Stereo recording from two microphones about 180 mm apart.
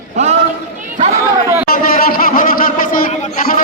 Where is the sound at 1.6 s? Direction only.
55° left (ahead or behind).